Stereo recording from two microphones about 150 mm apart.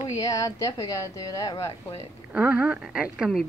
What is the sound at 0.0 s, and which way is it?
A woman's voice, 20° left (ahead or behind).